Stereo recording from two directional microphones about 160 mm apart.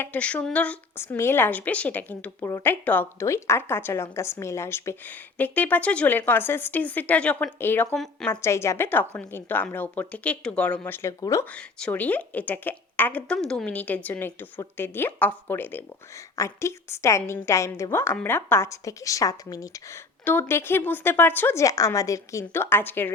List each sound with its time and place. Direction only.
0.0 s a woman's voice: 10° left (ahead or behind)
7.9 s a woman's voice: centre (ahead or behind)
8.3 s a woman's voice: 15° left (ahead or behind)
11.5 s a woman's voice: 10° left (ahead or behind)